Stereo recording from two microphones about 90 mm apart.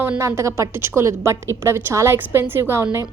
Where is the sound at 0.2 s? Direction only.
30° right (ahead or behind).